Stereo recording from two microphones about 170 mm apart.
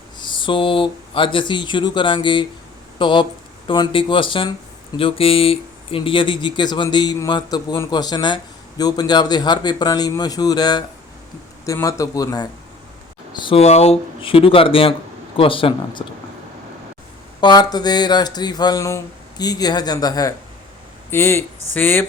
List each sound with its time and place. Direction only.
0.2 s speech: 30° left (ahead or behind)
17.4 s speech: 25° left (ahead or behind)